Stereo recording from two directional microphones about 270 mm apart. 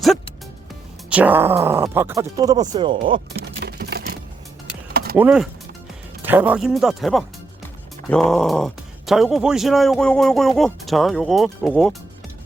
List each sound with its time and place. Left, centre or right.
1.1 s speech: centre
3.6 s a sound: right
5.1 s speech: centre